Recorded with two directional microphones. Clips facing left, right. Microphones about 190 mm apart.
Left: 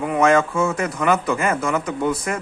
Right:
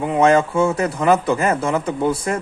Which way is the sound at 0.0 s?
30° right (ahead or behind).